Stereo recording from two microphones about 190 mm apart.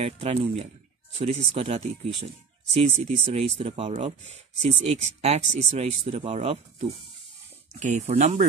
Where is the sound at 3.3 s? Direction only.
35° right (ahead or behind).